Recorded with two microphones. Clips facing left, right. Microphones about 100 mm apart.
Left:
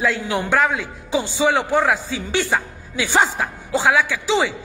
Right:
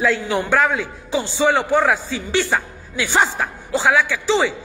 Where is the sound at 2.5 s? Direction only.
10° left (ahead or behind).